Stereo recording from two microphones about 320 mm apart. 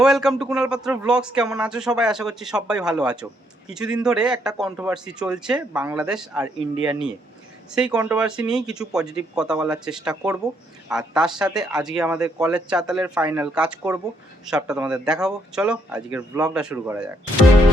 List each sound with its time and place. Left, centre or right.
0.0 s speech: centre